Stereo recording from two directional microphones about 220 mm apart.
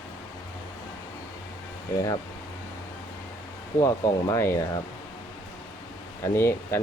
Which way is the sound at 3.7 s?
15° left (ahead or behind).